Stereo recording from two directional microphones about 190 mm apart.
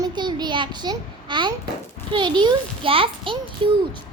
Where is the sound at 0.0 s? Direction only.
25° right (ahead or behind).